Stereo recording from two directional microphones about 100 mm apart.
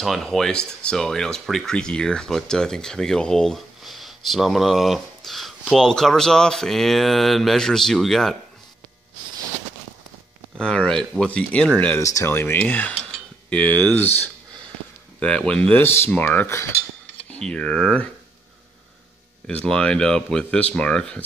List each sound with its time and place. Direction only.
0.0 s speech: centre (ahead or behind)
10.6 s speech: 10° left (ahead or behind)
12.0 s speech: 30° left (ahead or behind); by 12.9 s 15° left (ahead or behind)
12.9 s cutlery: 10° left (ahead or behind)
15.1 s speech: 10° left (ahead or behind)
15.8 s speech: 25° left (ahead or behind)
17.3 s speech: 10° left (ahead or behind)
19.4 s speech: 10° left (ahead or behind)